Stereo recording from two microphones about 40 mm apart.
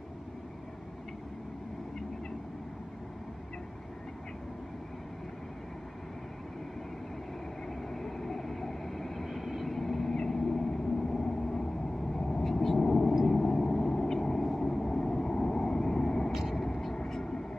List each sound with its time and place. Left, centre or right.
7.9 s vehicle: centre
16.3 s vehicle: centre
16.6 s vehicle: centre